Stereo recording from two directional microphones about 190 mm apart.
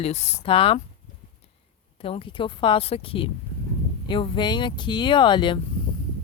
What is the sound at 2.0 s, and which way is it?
Speech, 30° left (ahead or behind).